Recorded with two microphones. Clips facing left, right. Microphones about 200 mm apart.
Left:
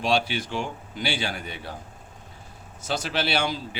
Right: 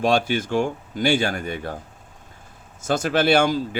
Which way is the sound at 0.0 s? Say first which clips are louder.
Right 5 dB; 50° right (ahead or behind).